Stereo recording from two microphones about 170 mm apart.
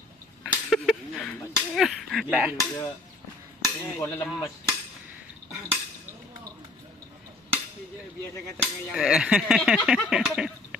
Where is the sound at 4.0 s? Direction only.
10° left (ahead or behind).